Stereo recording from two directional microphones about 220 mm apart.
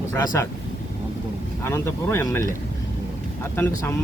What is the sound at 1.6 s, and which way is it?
Speech, 10° left (ahead or behind).